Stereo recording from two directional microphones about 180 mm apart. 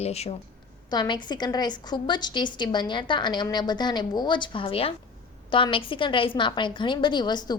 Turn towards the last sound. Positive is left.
turn(degrees=25)  # may be behind; listen again after turning